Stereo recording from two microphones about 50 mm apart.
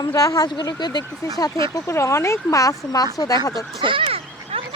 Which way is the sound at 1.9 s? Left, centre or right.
Left.